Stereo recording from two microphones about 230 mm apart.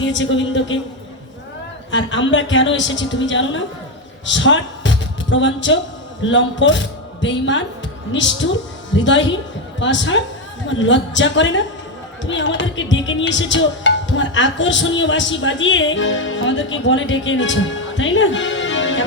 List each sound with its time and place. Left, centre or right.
0.0 s a woman's voice: left
1.9 s a woman's voice: left